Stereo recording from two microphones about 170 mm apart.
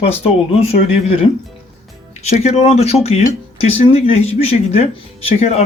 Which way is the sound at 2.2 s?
40° left (ahead or behind).